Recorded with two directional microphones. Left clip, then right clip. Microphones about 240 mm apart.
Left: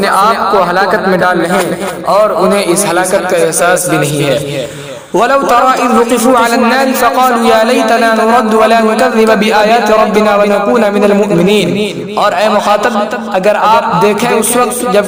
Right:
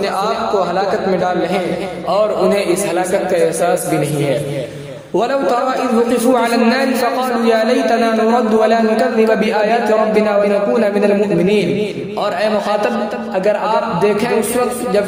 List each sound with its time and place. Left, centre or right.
0.0 s a man's voice: left; by 15.0 s centre